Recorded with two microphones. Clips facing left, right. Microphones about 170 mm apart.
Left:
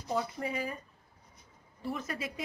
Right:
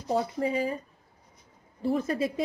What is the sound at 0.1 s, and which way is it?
Speech, 30° right (ahead or behind).